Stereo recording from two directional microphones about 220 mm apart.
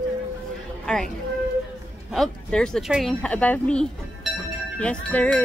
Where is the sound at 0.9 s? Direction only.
5° left (ahead or behind).